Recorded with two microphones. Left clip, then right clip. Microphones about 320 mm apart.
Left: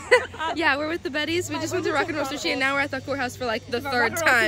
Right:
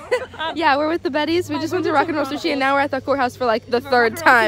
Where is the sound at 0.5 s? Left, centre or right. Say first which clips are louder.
Right 7 dB; centre.